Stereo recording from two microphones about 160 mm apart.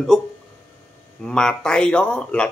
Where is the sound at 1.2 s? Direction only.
5° left (ahead or behind).